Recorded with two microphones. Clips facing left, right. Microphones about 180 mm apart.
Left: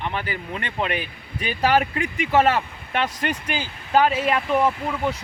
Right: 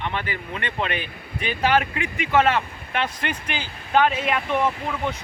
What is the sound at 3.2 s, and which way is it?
Speech, 40° left (ahead or behind).